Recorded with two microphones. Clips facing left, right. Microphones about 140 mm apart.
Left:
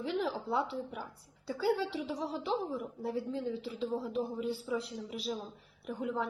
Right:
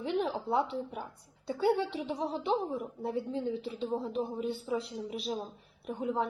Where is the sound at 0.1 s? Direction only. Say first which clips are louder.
Right 3 dB; 20° right (ahead or behind).